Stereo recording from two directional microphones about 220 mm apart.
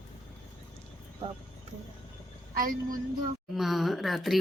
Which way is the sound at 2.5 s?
40° right (ahead or behind).